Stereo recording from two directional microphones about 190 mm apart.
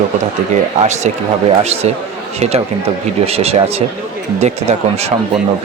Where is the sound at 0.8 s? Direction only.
35° right (ahead or behind).